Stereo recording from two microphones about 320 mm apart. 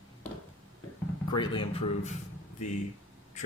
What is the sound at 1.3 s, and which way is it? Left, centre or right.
Speech, centre.